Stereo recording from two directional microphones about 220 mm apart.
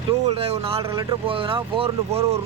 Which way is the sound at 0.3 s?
25° right (ahead or behind).